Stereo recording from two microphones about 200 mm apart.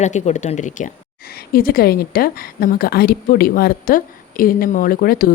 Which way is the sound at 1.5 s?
50° left (ahead or behind).